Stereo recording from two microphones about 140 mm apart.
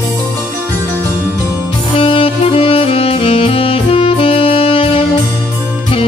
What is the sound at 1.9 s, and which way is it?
Saxophone, 40° left (ahead or behind).